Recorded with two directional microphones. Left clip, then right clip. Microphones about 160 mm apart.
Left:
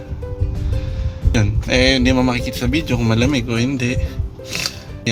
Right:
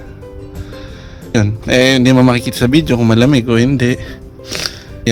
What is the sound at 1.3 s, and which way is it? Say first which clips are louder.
Speech: right 5 dB; 55° right (ahead or behind).